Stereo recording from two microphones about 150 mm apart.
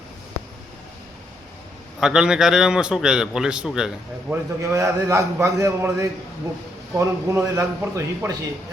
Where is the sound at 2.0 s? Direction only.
5° right (ahead or behind).